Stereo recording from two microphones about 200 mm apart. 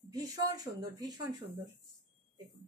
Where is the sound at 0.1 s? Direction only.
20° right (ahead or behind).